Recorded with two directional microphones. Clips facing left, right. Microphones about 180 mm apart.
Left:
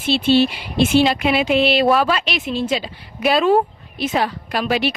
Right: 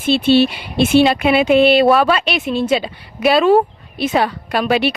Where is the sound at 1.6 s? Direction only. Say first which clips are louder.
Right 4 dB; 60° right (ahead or behind).